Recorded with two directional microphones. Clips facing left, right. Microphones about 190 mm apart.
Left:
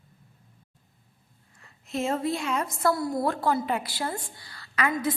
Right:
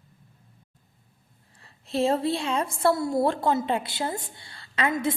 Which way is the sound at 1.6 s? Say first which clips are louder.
Right 5 dB; 30° right (ahead or behind).